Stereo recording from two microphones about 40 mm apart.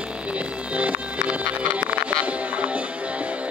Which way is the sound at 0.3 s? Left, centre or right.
Right.